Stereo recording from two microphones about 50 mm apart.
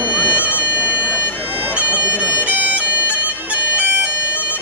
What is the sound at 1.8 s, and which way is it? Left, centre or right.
Bagpipes, right.